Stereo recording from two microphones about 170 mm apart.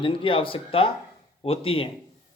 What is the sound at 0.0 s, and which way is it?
Speech, 30° left (ahead or behind).